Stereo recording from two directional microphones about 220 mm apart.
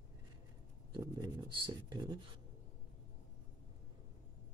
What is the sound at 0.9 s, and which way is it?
Writing, 20° right (ahead or behind).